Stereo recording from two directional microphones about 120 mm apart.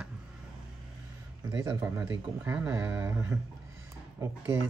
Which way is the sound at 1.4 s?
25° right (ahead or behind).